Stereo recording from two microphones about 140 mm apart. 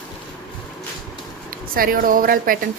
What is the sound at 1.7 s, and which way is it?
Speech, 90° right.